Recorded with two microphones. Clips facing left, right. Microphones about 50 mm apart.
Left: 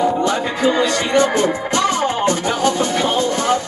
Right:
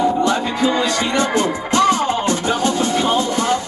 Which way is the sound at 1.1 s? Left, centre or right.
Left.